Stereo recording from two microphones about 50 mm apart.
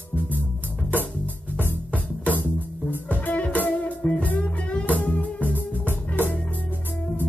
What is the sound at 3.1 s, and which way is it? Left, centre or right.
Music, left.